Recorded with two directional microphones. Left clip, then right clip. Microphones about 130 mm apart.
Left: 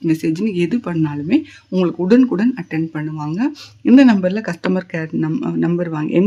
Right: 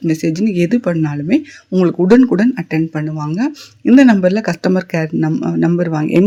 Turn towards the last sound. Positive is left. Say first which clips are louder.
# right 4 dB
turn(degrees=-30)  # may be behind; listen again after turning